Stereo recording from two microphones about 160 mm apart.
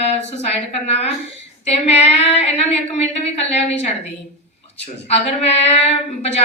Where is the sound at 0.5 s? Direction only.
45° left (ahead or behind).